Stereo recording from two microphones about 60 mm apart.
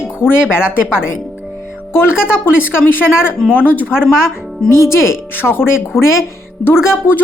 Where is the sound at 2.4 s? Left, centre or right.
Left.